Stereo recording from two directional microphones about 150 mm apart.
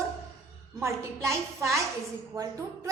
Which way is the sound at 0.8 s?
20° right (ahead or behind).